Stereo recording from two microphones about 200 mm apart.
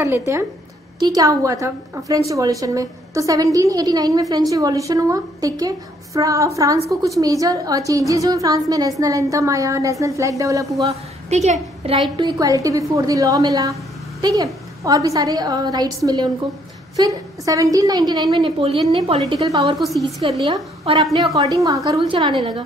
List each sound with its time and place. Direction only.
0.0 s a woman's voice: 15° right (ahead or behind)
10.9 s a woman's voice: 35° right (ahead or behind)
19.8 s a woman's voice: centre (ahead or behind)
20.8 s a woman's voice: 30° right (ahead or behind)
21.3 s a woman's voice: 15° right (ahead or behind)